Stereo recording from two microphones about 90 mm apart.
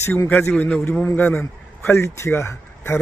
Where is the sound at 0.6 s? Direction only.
15° left (ahead or behind).